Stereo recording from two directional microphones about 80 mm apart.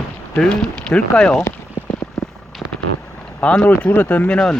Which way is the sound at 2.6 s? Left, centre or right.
Left.